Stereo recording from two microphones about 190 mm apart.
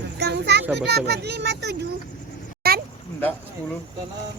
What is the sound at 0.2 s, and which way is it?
Children playing, 60° right (ahead or behind).